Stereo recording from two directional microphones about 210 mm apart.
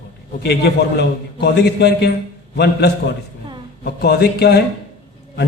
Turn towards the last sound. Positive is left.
turn(degrees=50)  # may be behind; listen again after turning